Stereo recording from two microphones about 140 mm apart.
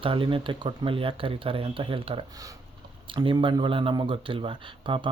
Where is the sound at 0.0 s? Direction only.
40° right (ahead or behind).